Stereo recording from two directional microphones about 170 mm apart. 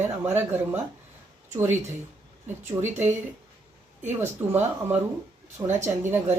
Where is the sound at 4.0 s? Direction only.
15° right (ahead or behind).